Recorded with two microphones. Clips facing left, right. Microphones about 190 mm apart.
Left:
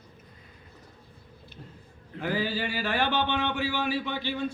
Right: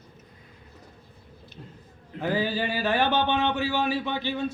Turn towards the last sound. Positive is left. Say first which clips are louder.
# right 2 dB
turn(degrees=-20)  # may be behind; listen again after turning